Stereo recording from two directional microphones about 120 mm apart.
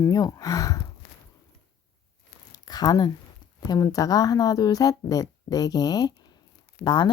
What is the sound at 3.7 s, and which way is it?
Speech, 30° left (ahead or behind).